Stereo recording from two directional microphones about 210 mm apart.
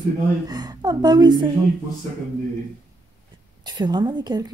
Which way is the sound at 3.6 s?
20° right (ahead or behind).